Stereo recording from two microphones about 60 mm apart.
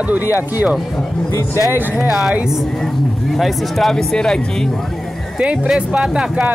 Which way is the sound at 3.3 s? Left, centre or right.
Centre.